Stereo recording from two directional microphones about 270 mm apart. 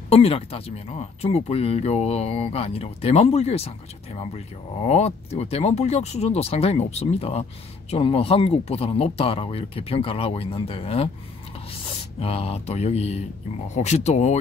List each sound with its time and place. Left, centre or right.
0.1 s speech: left